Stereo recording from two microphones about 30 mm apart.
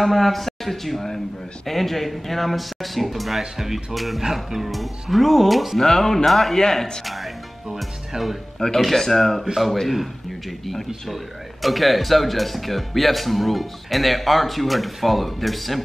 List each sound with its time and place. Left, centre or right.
0.0 s speech: centre
4.2 s speech: centre
5.8 s speech: centre
8.5 s speech: centre
11.6 s speech: centre